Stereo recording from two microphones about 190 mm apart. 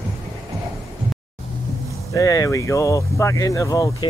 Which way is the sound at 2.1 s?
15° left (ahead or behind).